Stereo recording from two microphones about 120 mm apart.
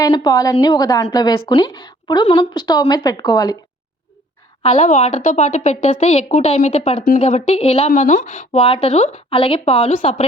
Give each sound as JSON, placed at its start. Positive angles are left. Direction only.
{"t": 0.0, "sound": "a woman's voice", "side_deg": 35}
{"t": 4.6, "sound": "a woman's voice", "side_deg": 80}